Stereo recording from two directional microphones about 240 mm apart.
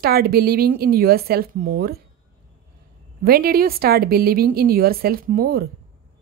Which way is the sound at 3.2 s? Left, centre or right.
Right.